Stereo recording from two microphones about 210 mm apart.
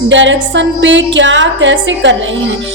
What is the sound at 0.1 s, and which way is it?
A woman's voice, 60° right (ahead or behind).